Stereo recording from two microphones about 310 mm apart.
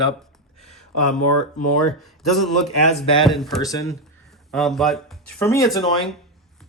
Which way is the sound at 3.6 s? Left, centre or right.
Centre.